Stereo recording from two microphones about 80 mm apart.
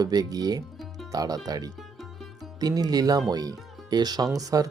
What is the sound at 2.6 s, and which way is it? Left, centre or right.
Speech, right.